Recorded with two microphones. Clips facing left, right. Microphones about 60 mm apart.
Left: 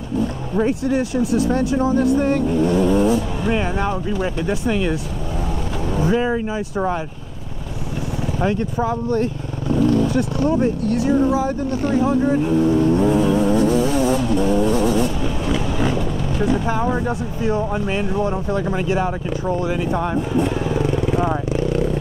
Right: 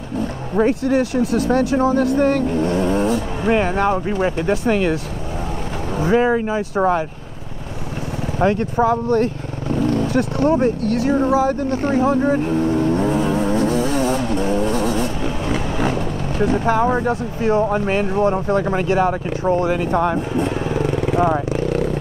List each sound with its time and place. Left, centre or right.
0.6 s speech: right
5.9 s speech: right
8.4 s speech: right
9.1 s vehicle: right
10.6 s speech: right
18.5 s speech: right
21.6 s vehicle: right